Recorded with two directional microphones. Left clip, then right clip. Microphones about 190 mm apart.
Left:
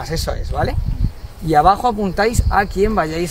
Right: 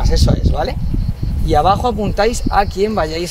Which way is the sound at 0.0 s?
25° left (ahead or behind).